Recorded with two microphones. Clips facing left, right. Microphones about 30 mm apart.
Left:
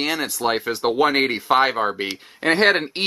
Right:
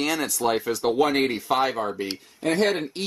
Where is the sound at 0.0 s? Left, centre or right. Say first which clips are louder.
Left 2 dB; left.